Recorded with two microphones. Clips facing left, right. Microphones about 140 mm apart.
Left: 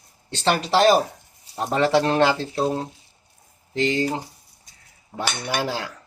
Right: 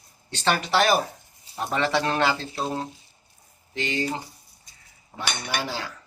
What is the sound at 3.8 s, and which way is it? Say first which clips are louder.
Speech: left 6 dB; 35° left (ahead or behind).